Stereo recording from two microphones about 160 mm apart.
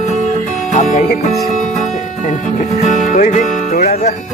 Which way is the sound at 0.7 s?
45° left (ahead or behind).